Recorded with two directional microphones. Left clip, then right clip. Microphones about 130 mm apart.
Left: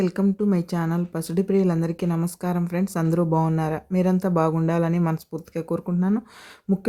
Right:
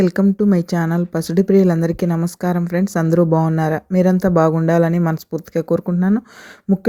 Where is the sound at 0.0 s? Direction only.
40° right (ahead or behind).